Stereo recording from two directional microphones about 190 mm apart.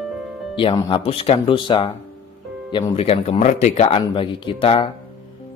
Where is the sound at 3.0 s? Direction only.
35° left (ahead or behind).